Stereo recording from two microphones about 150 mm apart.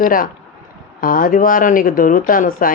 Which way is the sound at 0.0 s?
70° left (ahead or behind).